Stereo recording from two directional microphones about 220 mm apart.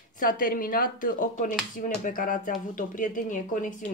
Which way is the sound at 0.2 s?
40° left (ahead or behind).